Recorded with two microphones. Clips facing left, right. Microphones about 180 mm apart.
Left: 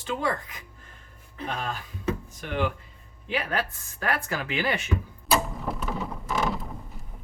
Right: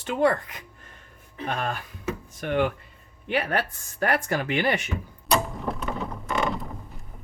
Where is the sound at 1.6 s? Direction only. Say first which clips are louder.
Right 3 dB; 60° right (ahead or behind).